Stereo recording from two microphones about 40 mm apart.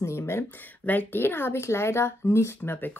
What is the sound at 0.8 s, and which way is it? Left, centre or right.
Speech, left.